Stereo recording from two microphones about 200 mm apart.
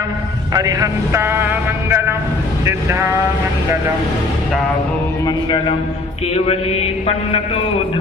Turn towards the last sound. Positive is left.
turn(degrees=30)  # may be behind; listen again after turning